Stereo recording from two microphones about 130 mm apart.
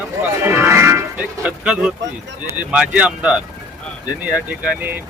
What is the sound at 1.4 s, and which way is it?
Speech, 10° right (ahead or behind).